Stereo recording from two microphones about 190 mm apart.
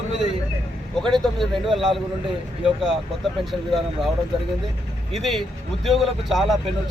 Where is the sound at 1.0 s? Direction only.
Centre (ahead or behind).